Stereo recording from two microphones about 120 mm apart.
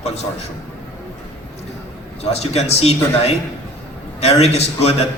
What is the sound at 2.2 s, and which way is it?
A man's voice, 60° left (ahead or behind).